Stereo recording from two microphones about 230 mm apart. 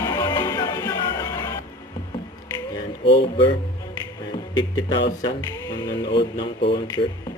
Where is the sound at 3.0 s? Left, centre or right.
Left.